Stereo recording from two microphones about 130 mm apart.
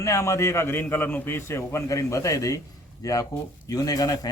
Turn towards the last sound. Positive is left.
turn(degrees=30)  # may be behind; listen again after turning